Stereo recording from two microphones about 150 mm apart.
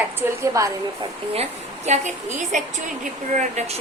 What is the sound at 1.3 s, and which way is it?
A woman's voice, 45° right (ahead or behind).